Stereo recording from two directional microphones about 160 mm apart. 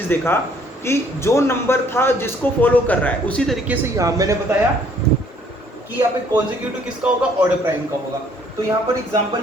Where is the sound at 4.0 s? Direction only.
20° right (ahead or behind).